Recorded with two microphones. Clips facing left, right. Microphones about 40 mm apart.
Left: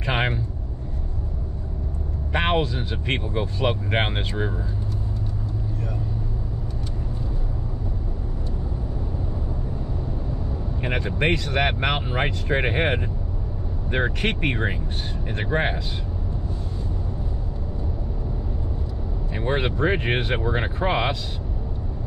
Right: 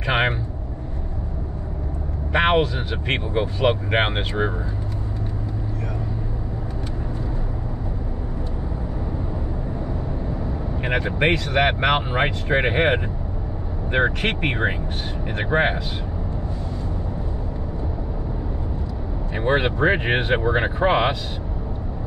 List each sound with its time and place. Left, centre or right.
0.0 s vehicle: right
2.3 s speech: right
10.8 s speech: right
19.3 s speech: right